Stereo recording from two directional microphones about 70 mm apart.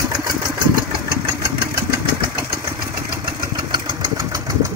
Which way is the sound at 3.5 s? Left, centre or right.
Right.